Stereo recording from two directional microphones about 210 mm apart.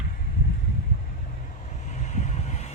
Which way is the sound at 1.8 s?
35° left (ahead or behind).